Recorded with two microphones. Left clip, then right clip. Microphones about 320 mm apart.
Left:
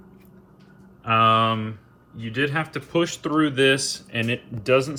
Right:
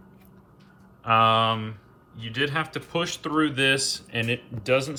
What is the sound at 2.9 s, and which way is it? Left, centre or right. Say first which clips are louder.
Speech: left 5 dB; right.